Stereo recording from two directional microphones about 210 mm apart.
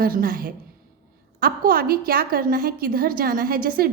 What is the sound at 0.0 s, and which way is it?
A woman's voice, 40° right (ahead or behind).